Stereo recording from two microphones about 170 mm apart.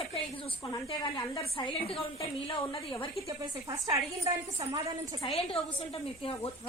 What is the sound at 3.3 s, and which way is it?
A woman's voice, 20° right (ahead or behind).